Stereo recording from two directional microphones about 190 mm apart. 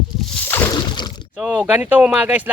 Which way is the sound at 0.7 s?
25° left (ahead or behind).